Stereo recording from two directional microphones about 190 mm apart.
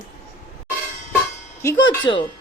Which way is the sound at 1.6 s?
20° left (ahead or behind).